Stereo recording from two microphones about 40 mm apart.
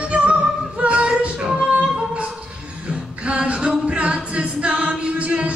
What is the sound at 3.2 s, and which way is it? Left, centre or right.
A capella, right.